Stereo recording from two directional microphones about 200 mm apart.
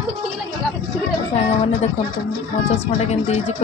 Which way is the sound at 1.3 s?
35° left (ahead or behind).